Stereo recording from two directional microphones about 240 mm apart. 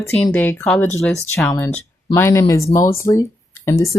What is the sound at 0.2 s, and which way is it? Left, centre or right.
A woman's voice, centre.